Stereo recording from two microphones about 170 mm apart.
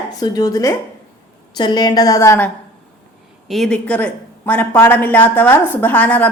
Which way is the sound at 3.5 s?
Centre (ahead or behind).